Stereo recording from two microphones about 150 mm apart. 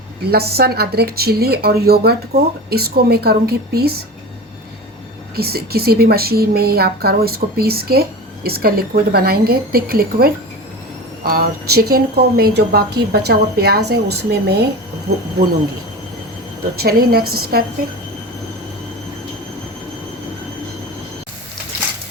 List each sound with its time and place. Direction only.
0.3 s a woman's voice: 90° right
5.4 s a woman's voice: 90° right
16.7 s a woman's voice: 90° right